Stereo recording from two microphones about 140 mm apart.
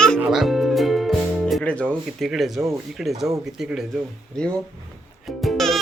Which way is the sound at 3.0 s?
5° right (ahead or behind).